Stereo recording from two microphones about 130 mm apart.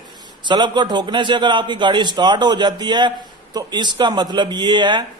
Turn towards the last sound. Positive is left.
turn(degrees=-35)  # may be behind; listen again after turning